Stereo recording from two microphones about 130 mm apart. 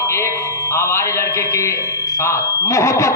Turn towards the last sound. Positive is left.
turn(degrees=20)  # may be behind; listen again after turning